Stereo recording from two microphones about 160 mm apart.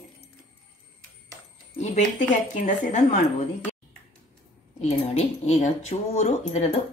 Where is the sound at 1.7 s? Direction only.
45° left (ahead or behind).